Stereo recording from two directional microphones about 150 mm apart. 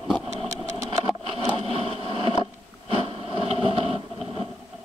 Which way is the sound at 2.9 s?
40° right (ahead or behind).